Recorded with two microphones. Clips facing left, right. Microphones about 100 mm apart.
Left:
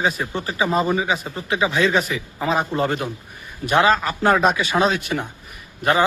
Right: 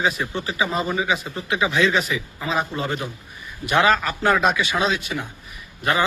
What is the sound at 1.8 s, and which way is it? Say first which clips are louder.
Speech: left 1 dB; 45° left (ahead or behind).